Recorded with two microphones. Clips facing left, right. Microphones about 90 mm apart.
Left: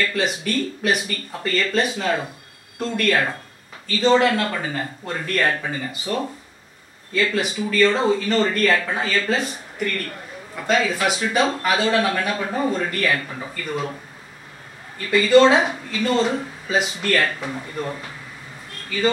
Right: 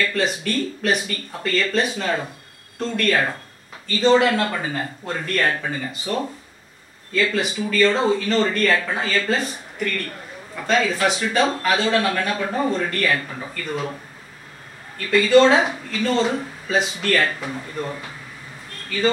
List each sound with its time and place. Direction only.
0.0 s speech: 5° left (ahead or behind)
15.0 s speech: centre (ahead or behind)